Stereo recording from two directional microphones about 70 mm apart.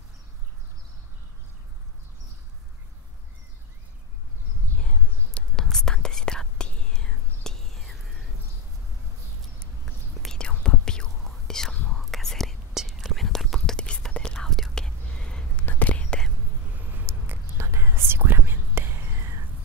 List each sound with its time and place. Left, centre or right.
4.7 s whispering: centre
9.8 s whispering: centre
15.6 s whispering: left
16.7 s whispering: right